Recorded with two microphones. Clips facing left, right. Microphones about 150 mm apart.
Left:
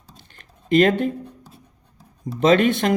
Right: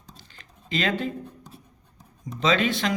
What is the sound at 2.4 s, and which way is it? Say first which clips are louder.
Speech: left 7 dB; 55° left (ahead or behind).